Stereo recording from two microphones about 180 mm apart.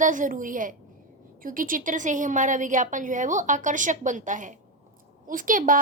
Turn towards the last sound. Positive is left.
turn(degrees=-50)  # may be behind; listen again after turning